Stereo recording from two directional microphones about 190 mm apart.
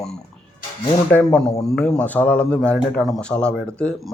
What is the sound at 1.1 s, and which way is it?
Speech, 5° left (ahead or behind).